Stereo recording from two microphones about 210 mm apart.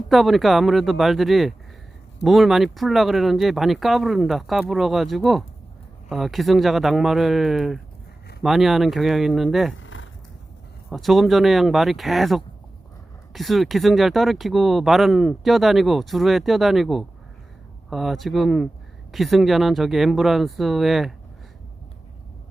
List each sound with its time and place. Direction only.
0.1 s speech: centre (ahead or behind)
9.7 s a sound: 65° left (ahead or behind)
10.8 s speech: centre (ahead or behind)